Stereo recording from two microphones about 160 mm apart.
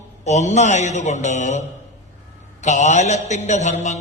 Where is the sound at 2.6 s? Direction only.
45° left (ahead or behind).